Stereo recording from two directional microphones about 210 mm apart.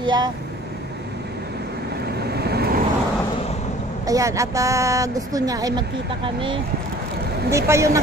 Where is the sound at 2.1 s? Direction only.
50° right (ahead or behind).